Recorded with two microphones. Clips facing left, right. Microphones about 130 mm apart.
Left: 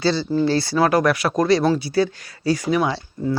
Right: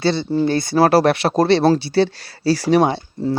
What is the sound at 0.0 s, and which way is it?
Speech, 25° right (ahead or behind).